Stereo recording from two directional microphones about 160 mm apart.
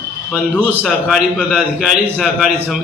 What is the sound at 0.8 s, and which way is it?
A man's voice, centre (ahead or behind).